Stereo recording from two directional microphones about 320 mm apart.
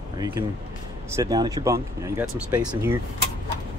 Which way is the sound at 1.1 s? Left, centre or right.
Centre.